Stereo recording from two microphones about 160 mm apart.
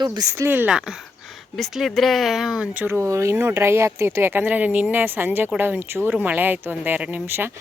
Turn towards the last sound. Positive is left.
turn(degrees=-15)  # may be behind; listen again after turning